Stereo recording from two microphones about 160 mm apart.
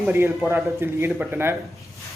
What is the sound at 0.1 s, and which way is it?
Speech, 15° right (ahead or behind).